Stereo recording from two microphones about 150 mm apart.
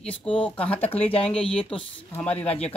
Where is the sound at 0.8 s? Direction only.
40° left (ahead or behind).